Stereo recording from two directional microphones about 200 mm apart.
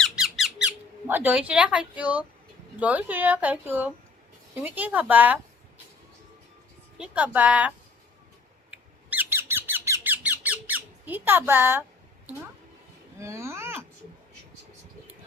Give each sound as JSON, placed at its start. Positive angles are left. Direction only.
{"t": 0.0, "sound": "squeak", "side_deg": 0}
{"t": 2.8, "sound": "speech", "side_deg": -10}
{"t": 7.0, "sound": "speech", "side_deg": -5}
{"t": 8.7, "sound": "squeak", "side_deg": -10}
{"t": 13.1, "sound": "a sound", "side_deg": -15}